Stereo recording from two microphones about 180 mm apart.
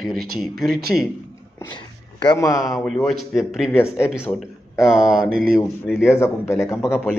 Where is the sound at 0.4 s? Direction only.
Centre (ahead or behind).